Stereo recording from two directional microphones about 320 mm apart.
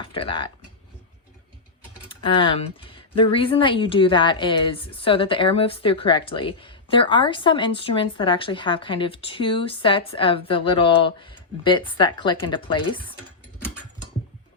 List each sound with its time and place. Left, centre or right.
0.0 s speech: centre
2.0 s speech: centre